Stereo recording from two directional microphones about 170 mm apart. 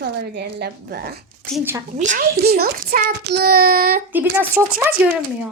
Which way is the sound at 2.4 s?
65° right (ahead or behind).